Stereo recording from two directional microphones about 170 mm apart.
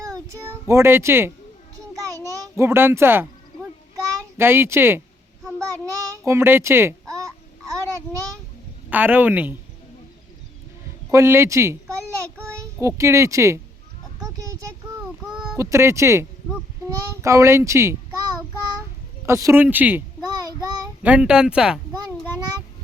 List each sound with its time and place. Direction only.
0.0 s a child's voice: 20° right (ahead or behind)
1.9 s a sound: 20° right (ahead or behind)
4.2 s speech: 15° right (ahead or behind)
5.5 s a sound: 20° right (ahead or behind)
8.9 s speech: 10° right (ahead or behind)
11.1 s a child's voice: 15° right (ahead or behind)
14.2 s a sound: 20° right (ahead or behind)
15.5 s speech: 15° right (ahead or behind)
19.2 s speech: 15° right (ahead or behind)
20.3 s child singing: 20° right (ahead or behind)
21.0 s speech: 10° right (ahead or behind)